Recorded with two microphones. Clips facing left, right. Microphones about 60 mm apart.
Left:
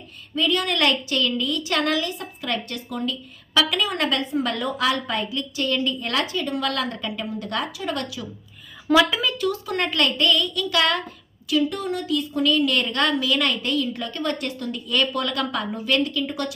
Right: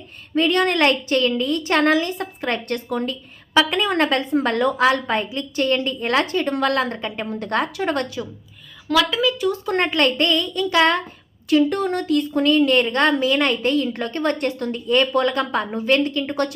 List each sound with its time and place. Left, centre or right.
0.3 s a woman's voice: right
1.9 s a woman's voice: right
3.5 s a woman's voice: right
4.4 s a woman's voice: right
4.8 s a woman's voice: right
8.9 s a woman's voice: centre
9.6 s a woman's voice: right
11.4 s a woman's voice: right